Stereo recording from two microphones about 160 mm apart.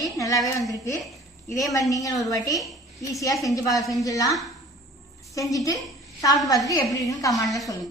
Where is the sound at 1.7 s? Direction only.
20° left (ahead or behind).